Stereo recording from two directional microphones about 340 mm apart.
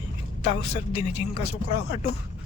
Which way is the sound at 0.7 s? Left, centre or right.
Centre.